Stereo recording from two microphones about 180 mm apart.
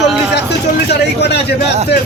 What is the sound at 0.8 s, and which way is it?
Speech, 70° left (ahead or behind).